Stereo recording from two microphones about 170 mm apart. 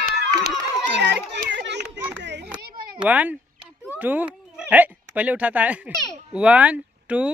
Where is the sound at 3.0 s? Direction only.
10° right (ahead or behind).